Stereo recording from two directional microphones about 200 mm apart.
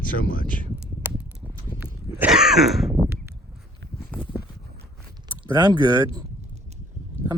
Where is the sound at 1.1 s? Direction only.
10° right (ahead or behind).